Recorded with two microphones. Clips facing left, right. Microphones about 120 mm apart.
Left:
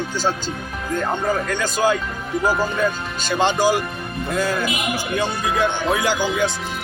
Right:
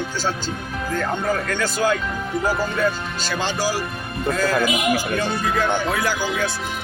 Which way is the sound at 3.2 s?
20° left (ahead or behind).